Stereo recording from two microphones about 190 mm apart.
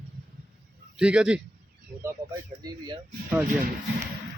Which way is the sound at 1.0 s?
5° right (ahead or behind).